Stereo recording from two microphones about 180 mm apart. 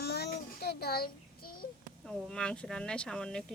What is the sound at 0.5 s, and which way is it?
Child singing, 60° left (ahead or behind).